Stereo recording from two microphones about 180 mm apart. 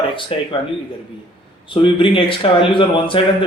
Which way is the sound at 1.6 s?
30° left (ahead or behind).